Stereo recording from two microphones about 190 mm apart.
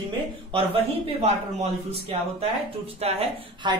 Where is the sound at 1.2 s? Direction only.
35° right (ahead or behind).